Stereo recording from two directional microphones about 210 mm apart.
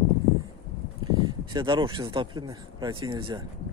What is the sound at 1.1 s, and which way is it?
Speech, 20° right (ahead or behind).